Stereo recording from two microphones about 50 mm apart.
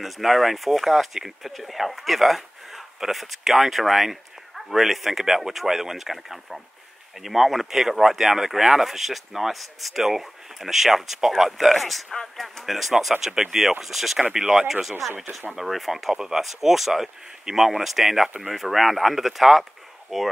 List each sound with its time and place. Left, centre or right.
0.0 s speech: centre
13.2 s speech: centre
14.4 s speech: right
14.7 s speech: centre